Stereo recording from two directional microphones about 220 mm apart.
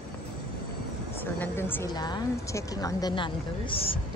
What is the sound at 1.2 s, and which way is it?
A woman's voice, 10° left (ahead or behind).